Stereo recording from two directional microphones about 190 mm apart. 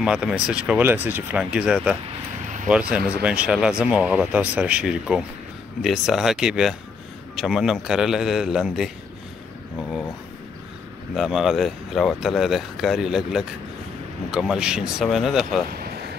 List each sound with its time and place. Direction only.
0.0 s speech: 5° right (ahead or behind)
2.3 s vehicle: 40° right (ahead or behind)
2.7 s speech: 5° right (ahead or behind)
11.1 s speech: centre (ahead or behind)